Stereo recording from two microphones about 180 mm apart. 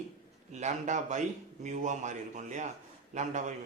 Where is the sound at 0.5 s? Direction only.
40° right (ahead or behind).